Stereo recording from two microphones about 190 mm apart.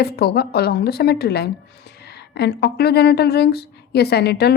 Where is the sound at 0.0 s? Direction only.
55° left (ahead or behind).